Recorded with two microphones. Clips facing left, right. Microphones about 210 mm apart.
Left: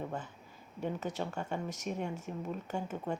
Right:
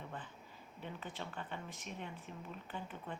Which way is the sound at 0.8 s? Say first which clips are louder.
Left 10 dB; 45° left (ahead or behind).